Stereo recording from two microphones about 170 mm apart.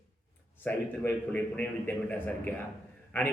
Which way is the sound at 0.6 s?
10° left (ahead or behind).